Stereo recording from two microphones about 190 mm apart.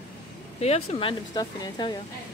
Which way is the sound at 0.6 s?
35° left (ahead or behind).